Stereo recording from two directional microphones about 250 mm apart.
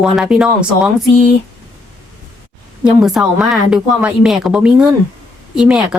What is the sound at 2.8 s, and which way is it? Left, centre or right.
A woman's voice, centre.